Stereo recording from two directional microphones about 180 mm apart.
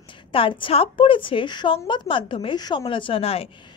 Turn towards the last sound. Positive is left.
turn(degrees=30)  # may be behind; listen again after turning